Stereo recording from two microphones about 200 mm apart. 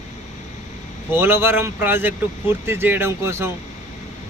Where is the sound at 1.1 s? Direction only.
10° right (ahead or behind).